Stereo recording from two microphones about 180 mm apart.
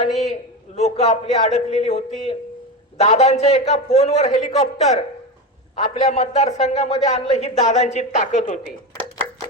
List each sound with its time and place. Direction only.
0.0 s a man's voice: 35° left (ahead or behind)